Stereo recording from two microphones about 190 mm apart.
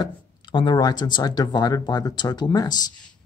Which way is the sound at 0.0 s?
25° left (ahead or behind).